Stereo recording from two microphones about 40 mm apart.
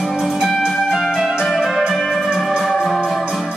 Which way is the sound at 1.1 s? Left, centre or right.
Centre.